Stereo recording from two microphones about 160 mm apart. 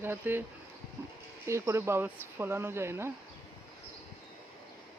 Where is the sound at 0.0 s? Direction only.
15° right (ahead or behind).